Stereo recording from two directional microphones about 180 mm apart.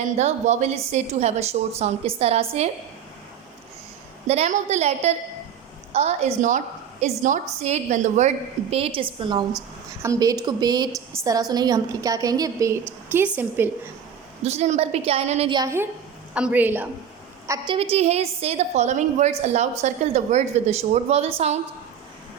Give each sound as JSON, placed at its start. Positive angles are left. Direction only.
{"t": 0.2, "sound": "a woman's voice", "side_deg": -40}
{"t": 4.3, "sound": "a woman's voice", "side_deg": -40}
{"t": 8.7, "sound": "a woman's voice", "side_deg": -30}
{"t": 14.4, "sound": "a woman's voice", "side_deg": -35}
{"t": 15.5, "sound": "a woman's voice", "side_deg": -15}
{"t": 17.7, "sound": "a woman's voice", "side_deg": -35}